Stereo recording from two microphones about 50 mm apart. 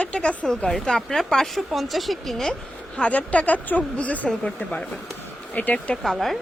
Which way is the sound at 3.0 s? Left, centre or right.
Left.